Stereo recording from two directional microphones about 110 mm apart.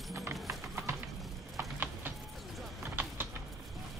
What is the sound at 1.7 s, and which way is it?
Clip-clop, 20° right (ahead or behind).